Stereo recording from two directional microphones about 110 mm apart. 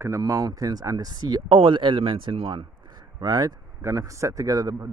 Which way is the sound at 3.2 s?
35° right (ahead or behind).